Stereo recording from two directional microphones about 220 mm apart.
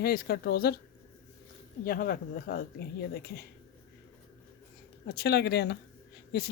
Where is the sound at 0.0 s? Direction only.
45° left (ahead or behind).